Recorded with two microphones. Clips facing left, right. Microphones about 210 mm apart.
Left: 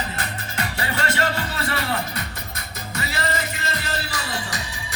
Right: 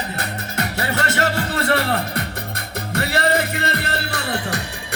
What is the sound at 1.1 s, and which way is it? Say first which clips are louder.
Music: right 2 dB; 65° right (ahead or behind).